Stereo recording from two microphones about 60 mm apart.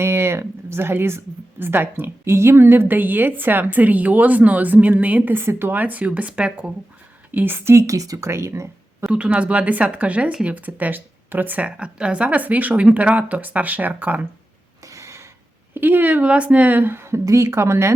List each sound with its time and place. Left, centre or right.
0.0 s speech: right
2.2 s speech: right
5.3 s speech: right
7.3 s a woman's voice: right
8.3 s speech: right
9.0 s speech: centre
14.8 s a sound: right
15.7 s a woman's voice: right
17.2 s a woman's voice: right